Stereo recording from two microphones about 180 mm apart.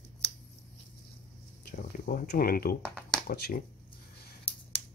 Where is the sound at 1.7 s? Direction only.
55° left (ahead or behind).